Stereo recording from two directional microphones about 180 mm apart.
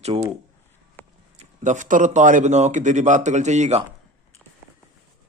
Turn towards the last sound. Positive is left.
turn(degrees=-40)  # may be behind; listen again after turning